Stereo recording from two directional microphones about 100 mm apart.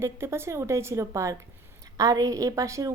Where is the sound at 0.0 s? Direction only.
25° right (ahead or behind).